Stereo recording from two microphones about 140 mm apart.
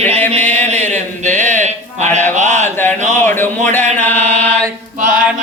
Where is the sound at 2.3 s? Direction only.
55° right (ahead or behind).